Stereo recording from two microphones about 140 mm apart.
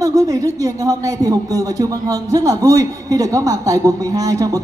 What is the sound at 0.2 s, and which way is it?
A man's voice, 25° right (ahead or behind).